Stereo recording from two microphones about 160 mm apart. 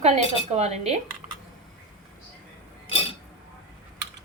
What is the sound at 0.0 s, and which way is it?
Speech, 45° right (ahead or behind).